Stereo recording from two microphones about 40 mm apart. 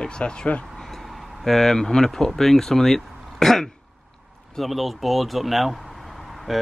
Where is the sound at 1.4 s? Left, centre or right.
Centre.